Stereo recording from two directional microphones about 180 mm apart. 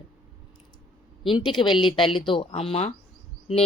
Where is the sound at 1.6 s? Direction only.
25° left (ahead or behind).